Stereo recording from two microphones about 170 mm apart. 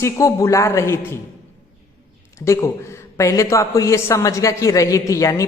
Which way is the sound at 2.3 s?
15° left (ahead or behind).